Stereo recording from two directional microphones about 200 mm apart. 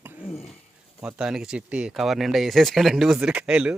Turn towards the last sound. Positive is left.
turn(degrees=-5)  # may be behind; listen again after turning